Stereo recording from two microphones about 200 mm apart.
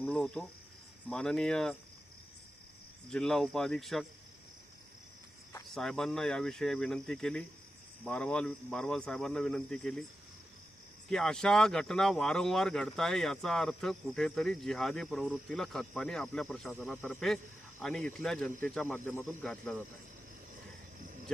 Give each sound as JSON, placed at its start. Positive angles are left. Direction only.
{"t": 0.0, "sound": "cricket", "side_deg": 5}
{"t": 1.0, "sound": "speech", "side_deg": 5}
{"t": 3.1, "sound": "speech", "side_deg": 5}
{"t": 5.7, "sound": "speech", "side_deg": 0}
{"t": 11.1, "sound": "speech", "side_deg": 0}